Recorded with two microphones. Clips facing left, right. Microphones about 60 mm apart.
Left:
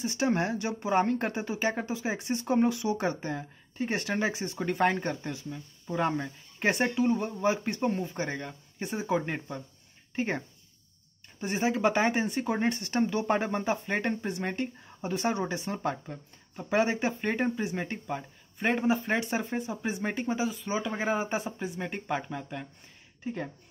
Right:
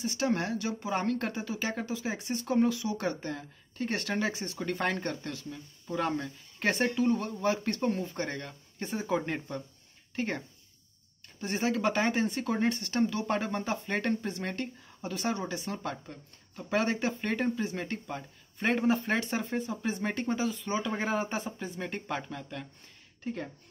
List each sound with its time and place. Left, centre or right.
0.0 s speech: left
11.4 s speech: centre